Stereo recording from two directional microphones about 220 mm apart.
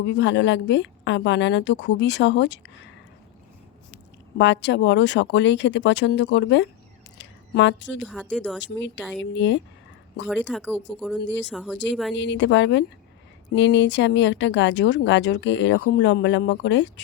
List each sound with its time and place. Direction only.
0.0 s speech: 55° left (ahead or behind)
3.9 s speech: 55° left (ahead or behind)
7.2 s a sound: 55° left (ahead or behind)
8.0 s speech: 5° right (ahead or behind)
8.7 s speech: 55° left (ahead or behind)
10.5 s speech: centre (ahead or behind)
11.2 s speech: 55° left (ahead or behind)
11.5 s speech: 5° right (ahead or behind)
12.1 s speech: 55° left (ahead or behind)